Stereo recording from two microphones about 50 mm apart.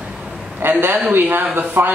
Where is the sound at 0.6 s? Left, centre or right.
Right.